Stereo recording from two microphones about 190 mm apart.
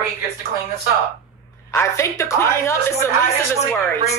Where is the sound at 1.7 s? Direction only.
15° left (ahead or behind).